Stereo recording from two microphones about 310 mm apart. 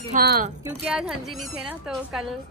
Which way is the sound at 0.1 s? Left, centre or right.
Right.